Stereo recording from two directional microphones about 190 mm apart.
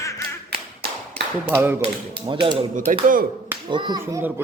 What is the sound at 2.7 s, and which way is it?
Speech, 40° right (ahead or behind).